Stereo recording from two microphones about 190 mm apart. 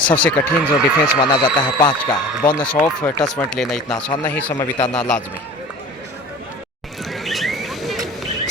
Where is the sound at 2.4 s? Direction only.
5° left (ahead or behind).